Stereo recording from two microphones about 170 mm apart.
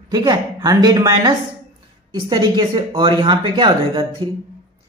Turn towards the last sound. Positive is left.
turn(degrees=-30)  # may be behind; listen again after turning